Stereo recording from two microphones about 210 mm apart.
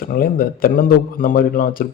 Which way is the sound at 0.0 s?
45° left (ahead or behind).